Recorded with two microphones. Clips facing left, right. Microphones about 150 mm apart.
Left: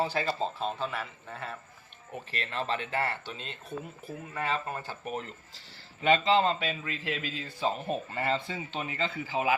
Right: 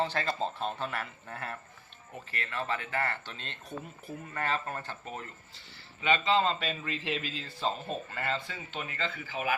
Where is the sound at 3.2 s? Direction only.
10° left (ahead or behind).